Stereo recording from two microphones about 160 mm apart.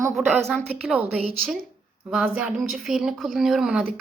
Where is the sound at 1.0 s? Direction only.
35° right (ahead or behind).